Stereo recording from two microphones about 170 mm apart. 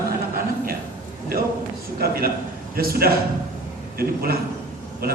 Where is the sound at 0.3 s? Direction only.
60° right (ahead or behind).